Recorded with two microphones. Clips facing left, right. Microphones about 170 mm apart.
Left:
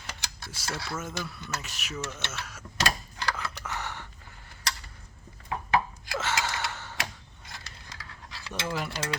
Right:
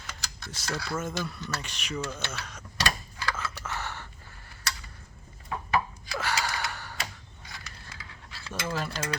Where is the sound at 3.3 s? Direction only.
15° left (ahead or behind).